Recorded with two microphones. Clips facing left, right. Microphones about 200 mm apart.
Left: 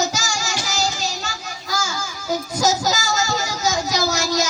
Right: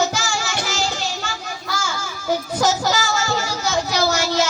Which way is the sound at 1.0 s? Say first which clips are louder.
Right 1 dB; 40° left (ahead or behind).